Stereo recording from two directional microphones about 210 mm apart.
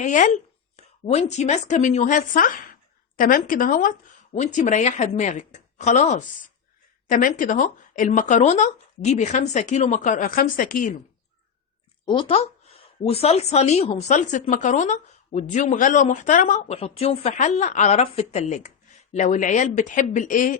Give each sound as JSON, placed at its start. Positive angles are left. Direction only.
{"t": 0.0, "sound": "a woman's voice", "side_deg": 35}
{"t": 12.0, "sound": "a woman's voice", "side_deg": 25}